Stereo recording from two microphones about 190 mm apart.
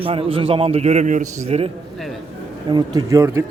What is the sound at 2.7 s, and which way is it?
Speech, 20° right (ahead or behind).